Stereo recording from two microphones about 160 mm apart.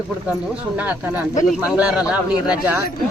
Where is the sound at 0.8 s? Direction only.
10° right (ahead or behind).